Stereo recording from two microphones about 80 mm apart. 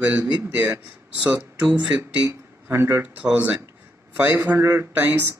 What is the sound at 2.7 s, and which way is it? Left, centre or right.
A man's voice, right.